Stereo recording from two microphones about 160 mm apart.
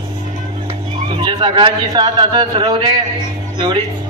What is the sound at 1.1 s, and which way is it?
A man's voice, 30° right (ahead or behind).